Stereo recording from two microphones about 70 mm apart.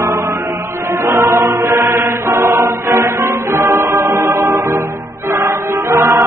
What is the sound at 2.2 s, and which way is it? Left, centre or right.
Music, right.